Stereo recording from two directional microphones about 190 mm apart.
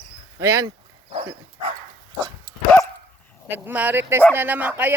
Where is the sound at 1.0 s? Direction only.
30° right (ahead or behind).